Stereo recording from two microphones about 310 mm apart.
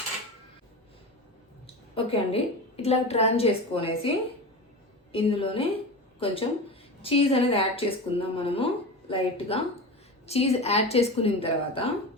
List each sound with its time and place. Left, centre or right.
1.6 s a woman's voice: centre
5.1 s a woman's voice: centre